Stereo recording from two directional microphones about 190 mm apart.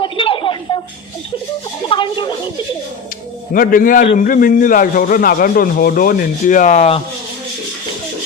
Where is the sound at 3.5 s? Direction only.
45° left (ahead or behind).